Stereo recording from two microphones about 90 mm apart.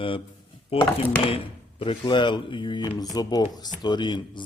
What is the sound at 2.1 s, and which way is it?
Speech, 60° left (ahead or behind).